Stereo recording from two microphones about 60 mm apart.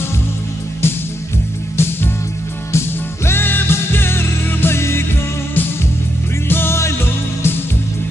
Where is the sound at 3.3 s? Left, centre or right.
Left.